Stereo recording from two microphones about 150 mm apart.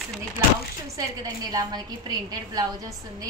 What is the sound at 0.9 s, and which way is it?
A woman's voice, 25° right (ahead or behind).